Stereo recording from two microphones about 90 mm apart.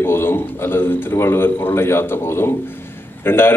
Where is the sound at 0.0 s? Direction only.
25° left (ahead or behind).